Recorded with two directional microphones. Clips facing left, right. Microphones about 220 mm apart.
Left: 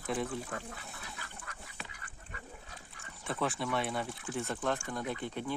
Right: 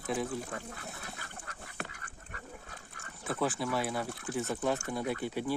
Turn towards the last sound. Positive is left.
turn(degrees=-5)  # may be behind; listen again after turning